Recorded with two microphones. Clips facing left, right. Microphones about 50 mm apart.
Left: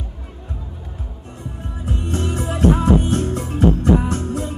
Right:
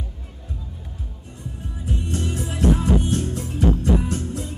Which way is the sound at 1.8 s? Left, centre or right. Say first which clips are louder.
Left 3 dB; left.